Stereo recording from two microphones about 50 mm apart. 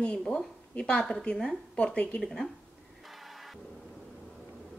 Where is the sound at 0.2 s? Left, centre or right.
Centre.